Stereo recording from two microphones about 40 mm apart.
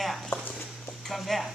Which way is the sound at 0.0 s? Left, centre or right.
Centre.